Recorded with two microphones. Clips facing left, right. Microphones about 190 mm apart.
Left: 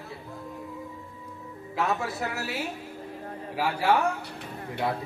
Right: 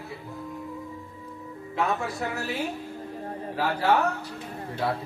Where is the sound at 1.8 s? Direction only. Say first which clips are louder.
Right 1 dB; 5° left (ahead or behind).